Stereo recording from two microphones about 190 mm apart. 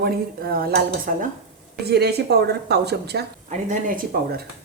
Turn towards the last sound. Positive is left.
turn(degrees=-50)  # may be behind; listen again after turning